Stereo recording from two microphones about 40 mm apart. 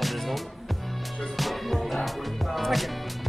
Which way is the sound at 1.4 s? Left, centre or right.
Centre.